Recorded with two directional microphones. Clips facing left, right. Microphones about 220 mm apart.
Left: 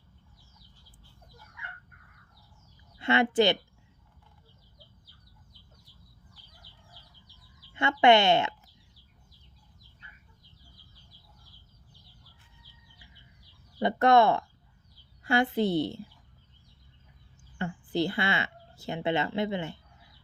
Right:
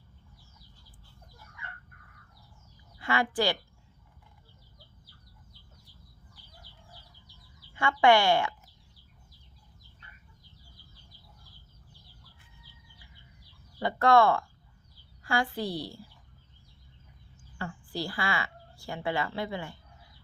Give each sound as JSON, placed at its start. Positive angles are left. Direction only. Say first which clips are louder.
{"t": 3.0, "sound": "speech", "louder": "left 5 dB", "side_deg": 25}
{"t": 7.7, "sound": "speech", "louder": "left 1 dB", "side_deg": 20}
{"t": 13.7, "sound": "speech", "louder": "left 1 dB", "side_deg": 20}
{"t": 17.6, "sound": "speech", "louder": "left 7 dB", "side_deg": 20}